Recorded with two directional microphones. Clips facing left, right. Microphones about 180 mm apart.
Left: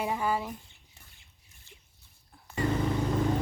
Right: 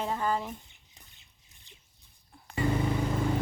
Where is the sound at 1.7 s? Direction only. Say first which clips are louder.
Left 3 dB; 15° right (ahead or behind).